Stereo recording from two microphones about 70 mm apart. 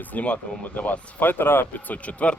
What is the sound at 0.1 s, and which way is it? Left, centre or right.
Speech, left.